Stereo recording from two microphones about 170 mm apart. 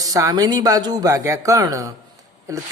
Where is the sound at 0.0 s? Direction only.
20° right (ahead or behind).